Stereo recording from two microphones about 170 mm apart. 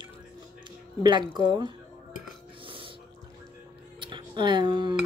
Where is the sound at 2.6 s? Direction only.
30° right (ahead or behind).